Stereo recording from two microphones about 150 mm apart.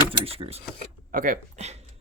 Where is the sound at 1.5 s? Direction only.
45° right (ahead or behind).